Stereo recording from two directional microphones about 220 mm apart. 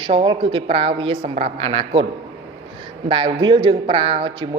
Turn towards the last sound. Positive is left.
turn(degrees=-25)  # may be behind; listen again after turning